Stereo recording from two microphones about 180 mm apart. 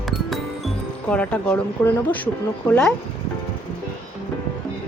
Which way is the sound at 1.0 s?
10° left (ahead or behind).